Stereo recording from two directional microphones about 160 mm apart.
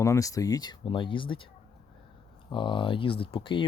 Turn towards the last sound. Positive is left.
turn(degrees=30)  # may be behind; listen again after turning